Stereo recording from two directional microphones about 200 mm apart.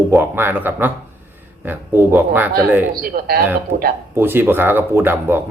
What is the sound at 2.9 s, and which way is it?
Speech, 45° right (ahead or behind).